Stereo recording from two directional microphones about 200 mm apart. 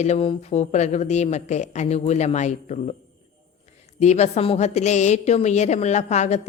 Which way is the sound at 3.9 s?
35° left (ahead or behind).